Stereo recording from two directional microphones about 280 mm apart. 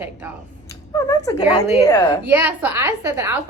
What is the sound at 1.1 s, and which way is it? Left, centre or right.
Speech, centre.